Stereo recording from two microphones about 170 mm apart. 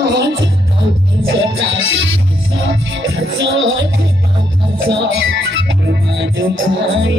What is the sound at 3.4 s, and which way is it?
Music, 90° right.